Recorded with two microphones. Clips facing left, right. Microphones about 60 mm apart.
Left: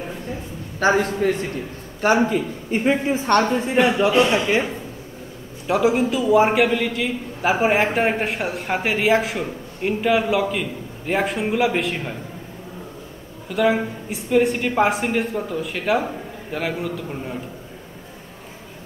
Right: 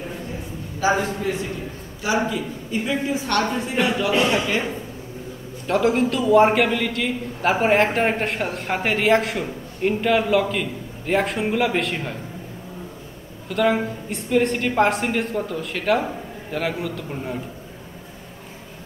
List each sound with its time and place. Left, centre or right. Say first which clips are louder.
0.7 s a man's voice: left 3 dB; left
5.7 s a man's voice: left 1 dB; centre
13.5 s a man's voice: left 1 dB; centre